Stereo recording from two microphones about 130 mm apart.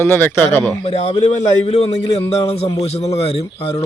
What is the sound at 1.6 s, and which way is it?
Speech, 60° left (ahead or behind).